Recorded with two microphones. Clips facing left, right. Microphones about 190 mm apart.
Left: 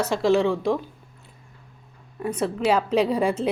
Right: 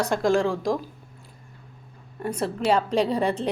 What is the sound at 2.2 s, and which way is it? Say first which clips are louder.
A woman's voice: left 2 dB; 5° left (ahead or behind).